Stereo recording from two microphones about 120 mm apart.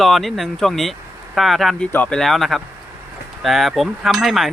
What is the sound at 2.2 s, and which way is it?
Speech, centre (ahead or behind).